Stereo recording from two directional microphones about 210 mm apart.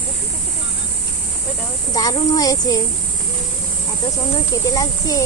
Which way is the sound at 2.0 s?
20° left (ahead or behind).